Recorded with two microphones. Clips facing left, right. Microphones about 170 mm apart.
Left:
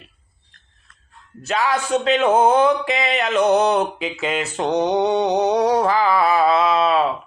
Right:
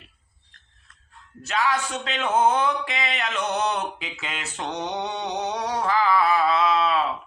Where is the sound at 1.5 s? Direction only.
40° left (ahead or behind).